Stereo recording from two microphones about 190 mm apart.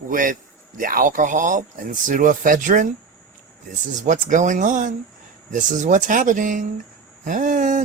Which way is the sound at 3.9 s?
40° right (ahead or behind).